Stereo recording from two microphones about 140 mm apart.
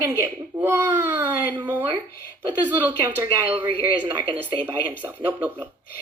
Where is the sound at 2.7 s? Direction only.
15° right (ahead or behind).